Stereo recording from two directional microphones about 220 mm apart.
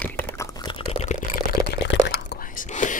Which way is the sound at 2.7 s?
35° left (ahead or behind).